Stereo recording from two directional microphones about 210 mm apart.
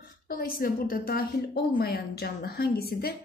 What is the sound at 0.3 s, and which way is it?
A woman's voice, 45° left (ahead or behind).